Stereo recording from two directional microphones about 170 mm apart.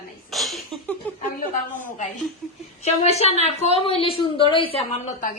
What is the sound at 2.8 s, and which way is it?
A woman's voice, 40° left (ahead or behind).